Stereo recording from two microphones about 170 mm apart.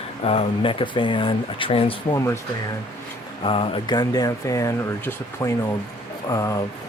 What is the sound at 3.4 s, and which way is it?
Speech, 30° left (ahead or behind).